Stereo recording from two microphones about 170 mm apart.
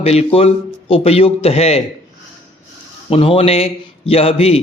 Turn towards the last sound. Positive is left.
turn(degrees=35)  # may be behind; listen again after turning